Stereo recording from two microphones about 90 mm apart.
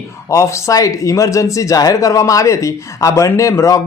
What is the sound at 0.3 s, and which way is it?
Speech, 35° left (ahead or behind).